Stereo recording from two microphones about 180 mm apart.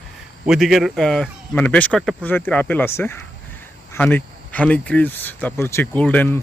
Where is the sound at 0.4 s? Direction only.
Centre (ahead or behind).